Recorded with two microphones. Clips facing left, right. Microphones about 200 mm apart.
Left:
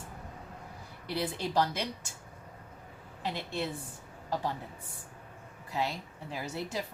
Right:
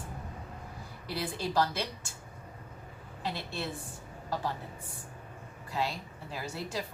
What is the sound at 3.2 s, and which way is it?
Speech, 20° left (ahead or behind).